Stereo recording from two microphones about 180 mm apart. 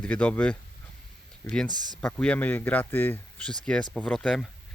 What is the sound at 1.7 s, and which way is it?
Speech, 25° right (ahead or behind).